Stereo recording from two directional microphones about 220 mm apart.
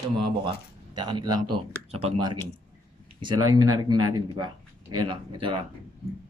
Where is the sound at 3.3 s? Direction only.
75° right (ahead or behind).